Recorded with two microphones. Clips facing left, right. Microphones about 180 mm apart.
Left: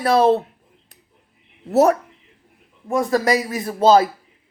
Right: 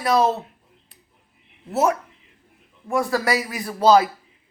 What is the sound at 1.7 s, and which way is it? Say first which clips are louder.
Speech: left 6 dB; 40° left (ahead or behind).